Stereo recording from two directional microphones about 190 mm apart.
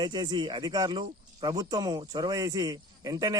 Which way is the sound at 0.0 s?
25° right (ahead or behind).